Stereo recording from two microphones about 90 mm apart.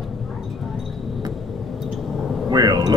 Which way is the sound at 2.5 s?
50° right (ahead or behind).